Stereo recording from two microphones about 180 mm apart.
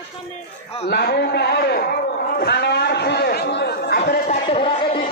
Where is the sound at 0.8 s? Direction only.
65° left (ahead or behind).